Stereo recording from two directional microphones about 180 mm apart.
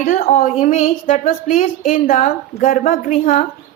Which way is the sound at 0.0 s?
45° left (ahead or behind).